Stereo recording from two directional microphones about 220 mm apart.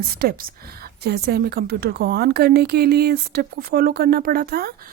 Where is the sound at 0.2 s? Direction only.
45° right (ahead or behind).